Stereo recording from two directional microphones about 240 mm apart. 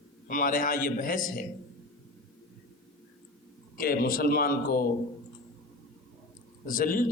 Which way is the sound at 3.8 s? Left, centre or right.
Left.